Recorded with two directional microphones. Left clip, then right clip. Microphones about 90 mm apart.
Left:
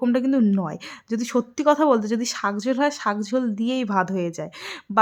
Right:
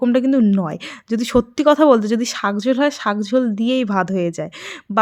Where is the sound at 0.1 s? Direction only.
25° right (ahead or behind).